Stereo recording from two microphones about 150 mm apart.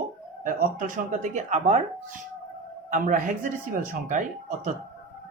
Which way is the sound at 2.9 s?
60° right (ahead or behind).